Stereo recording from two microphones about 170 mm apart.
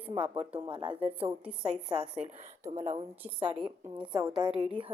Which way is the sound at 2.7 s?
40° right (ahead or behind).